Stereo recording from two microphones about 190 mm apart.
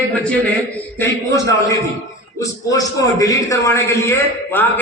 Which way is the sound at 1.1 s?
15° left (ahead or behind).